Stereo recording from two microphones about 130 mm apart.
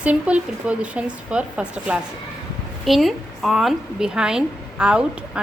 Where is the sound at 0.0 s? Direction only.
10° right (ahead or behind).